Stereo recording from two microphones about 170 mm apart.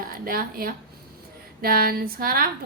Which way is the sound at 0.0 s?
60° right (ahead or behind).